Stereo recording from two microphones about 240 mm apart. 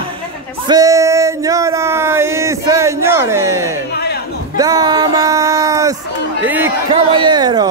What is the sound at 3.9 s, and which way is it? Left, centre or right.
Music, left.